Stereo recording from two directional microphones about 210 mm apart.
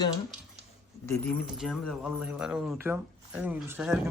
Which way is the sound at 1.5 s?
Centre (ahead or behind).